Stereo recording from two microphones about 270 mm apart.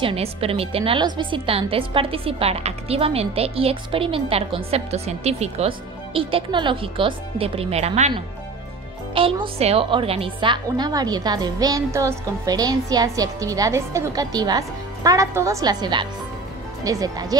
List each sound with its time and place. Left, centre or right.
0.0 s a woman's voice: right